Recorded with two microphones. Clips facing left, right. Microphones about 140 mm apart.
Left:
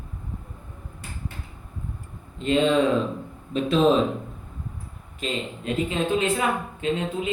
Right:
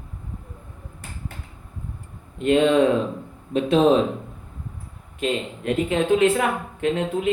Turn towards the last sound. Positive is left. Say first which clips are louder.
# right 4 dB
turn(degrees=-60)  # may be behind; listen again after turning